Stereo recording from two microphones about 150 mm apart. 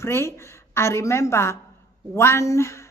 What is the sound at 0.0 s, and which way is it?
A woman's voice, 15° left (ahead or behind).